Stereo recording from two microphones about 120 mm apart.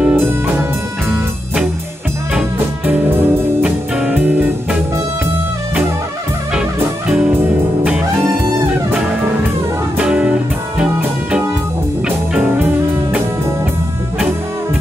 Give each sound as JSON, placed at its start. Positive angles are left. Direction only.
{"t": 0.0, "sound": "music", "side_deg": -15}
{"t": 1.1, "sound": "music", "side_deg": -10}
{"t": 2.9, "sound": "music", "side_deg": -10}
{"t": 7.1, "sound": "music", "side_deg": -5}
{"t": 9.9, "sound": "music", "side_deg": -10}